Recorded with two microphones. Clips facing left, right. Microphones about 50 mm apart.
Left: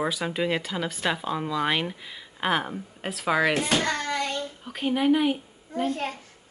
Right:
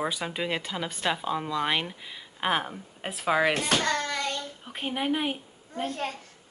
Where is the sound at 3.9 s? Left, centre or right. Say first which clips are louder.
Left 1 dB; left.